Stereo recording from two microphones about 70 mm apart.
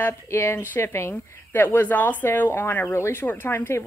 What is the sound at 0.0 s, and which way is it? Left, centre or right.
Speech, left.